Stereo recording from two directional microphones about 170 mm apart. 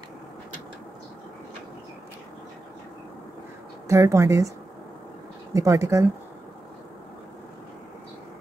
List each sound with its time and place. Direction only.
3.8 s a woman's voice: 15° right (ahead or behind)
5.5 s speech: 20° right (ahead or behind)